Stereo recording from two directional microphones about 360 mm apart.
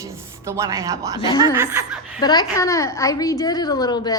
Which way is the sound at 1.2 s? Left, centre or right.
Centre.